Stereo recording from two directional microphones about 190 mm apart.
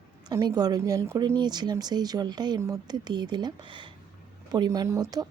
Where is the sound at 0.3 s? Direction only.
20° right (ahead or behind).